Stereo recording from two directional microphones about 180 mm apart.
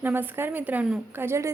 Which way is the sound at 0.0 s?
10° right (ahead or behind).